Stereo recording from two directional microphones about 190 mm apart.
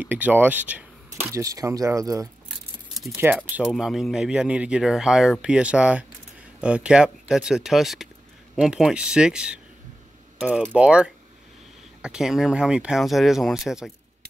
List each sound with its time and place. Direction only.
0.0 s speech: 10° right (ahead or behind)